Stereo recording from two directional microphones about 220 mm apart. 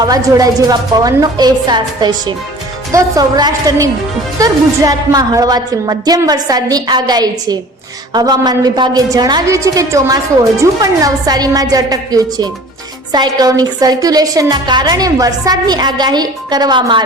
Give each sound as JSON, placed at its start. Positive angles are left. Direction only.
{"t": 0.0, "sound": "a woman's voice", "side_deg": -15}